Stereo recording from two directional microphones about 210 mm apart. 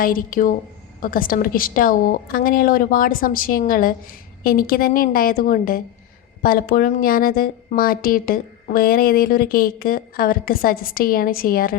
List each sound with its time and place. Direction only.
0.0 s a woman's voice: 40° left (ahead or behind)